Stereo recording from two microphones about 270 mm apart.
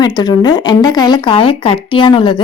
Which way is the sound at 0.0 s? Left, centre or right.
Centre.